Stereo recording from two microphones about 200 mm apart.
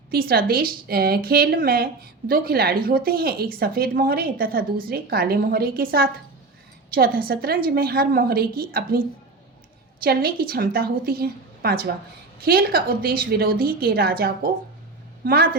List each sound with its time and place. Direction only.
0.1 s a woman's voice: 50° right (ahead or behind)